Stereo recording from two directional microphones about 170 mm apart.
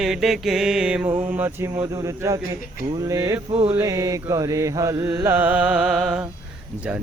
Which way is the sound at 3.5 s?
35° right (ahead or behind).